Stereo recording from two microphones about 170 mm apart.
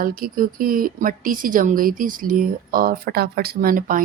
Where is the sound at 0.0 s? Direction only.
60° right (ahead or behind).